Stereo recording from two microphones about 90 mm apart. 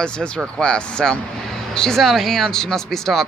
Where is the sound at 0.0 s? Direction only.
10° left (ahead or behind).